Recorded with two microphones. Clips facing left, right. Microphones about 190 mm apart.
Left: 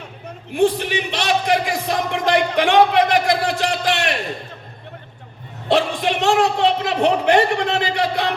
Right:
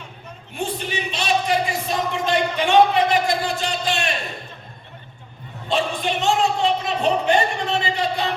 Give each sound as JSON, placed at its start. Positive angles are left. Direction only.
{"t": 0.5, "sound": "music", "side_deg": 85}
{"t": 5.6, "sound": "a man's voice", "side_deg": 85}